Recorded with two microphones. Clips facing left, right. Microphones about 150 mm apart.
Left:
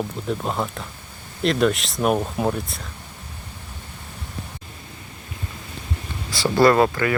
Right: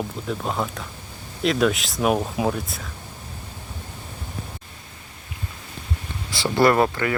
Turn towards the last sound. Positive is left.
turn(degrees=-20)  # may be behind; listen again after turning